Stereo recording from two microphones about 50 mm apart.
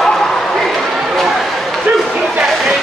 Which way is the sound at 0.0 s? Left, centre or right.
Centre.